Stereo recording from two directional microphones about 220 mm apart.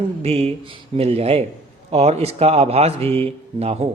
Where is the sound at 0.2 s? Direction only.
30° right (ahead or behind).